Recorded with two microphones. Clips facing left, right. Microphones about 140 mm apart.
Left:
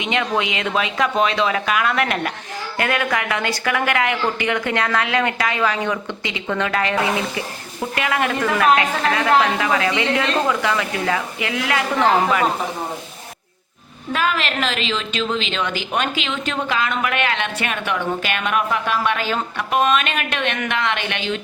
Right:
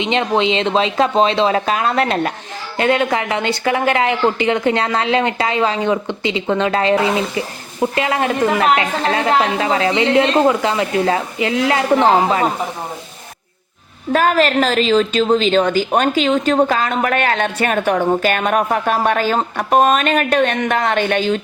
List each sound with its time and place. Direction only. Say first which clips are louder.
0.0 s speech: right 5 dB; 30° right (ahead or behind)
14.1 s a woman's voice: right 8 dB; 45° right (ahead or behind)